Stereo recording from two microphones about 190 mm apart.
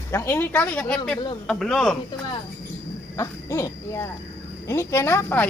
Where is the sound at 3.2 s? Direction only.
15° left (ahead or behind).